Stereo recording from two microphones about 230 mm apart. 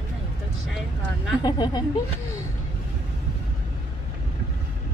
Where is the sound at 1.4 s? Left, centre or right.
Centre.